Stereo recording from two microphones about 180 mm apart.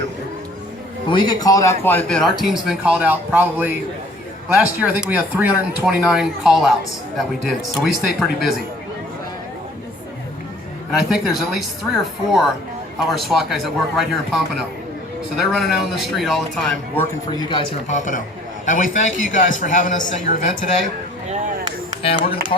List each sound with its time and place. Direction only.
1.1 s speech: 25° left (ahead or behind); by 8.5 s centre (ahead or behind)
10.9 s speech: centre (ahead or behind)
17.3 s a man's voice: 25° left (ahead or behind); by 20.7 s 45° left (ahead or behind)